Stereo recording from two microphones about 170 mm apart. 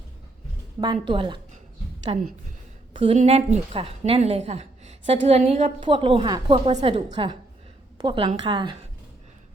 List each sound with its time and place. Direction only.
0.9 s a woman's voice: 30° right (ahead or behind)